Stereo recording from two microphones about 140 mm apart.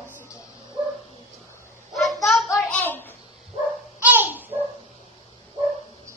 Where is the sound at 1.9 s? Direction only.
Centre (ahead or behind).